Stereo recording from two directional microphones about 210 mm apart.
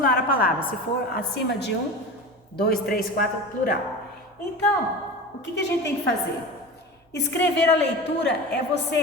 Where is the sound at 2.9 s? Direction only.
40° left (ahead or behind).